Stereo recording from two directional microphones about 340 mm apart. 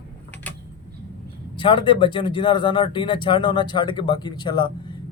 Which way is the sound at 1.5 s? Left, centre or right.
Centre.